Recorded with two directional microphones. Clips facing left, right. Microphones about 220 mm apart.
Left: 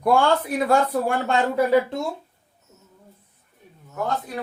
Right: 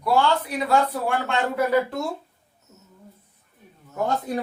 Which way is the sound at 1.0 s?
40° left (ahead or behind).